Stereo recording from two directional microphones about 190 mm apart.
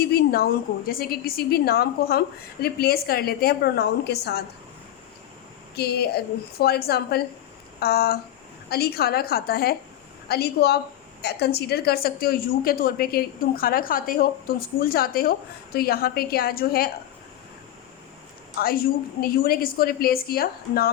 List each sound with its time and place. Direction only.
0.0 s a woman's voice: 55° left (ahead or behind)
5.7 s a woman's voice: 55° left (ahead or behind)
18.5 s a woman's voice: 50° left (ahead or behind)